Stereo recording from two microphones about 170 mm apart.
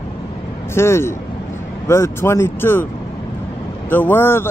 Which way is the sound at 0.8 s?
15° left (ahead or behind).